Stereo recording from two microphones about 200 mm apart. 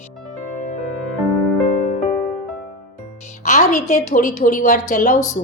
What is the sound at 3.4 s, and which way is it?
A woman's voice, 35° left (ahead or behind).